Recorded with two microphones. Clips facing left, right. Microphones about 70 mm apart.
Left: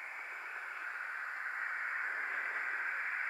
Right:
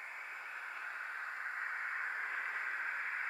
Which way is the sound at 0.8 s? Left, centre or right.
Centre.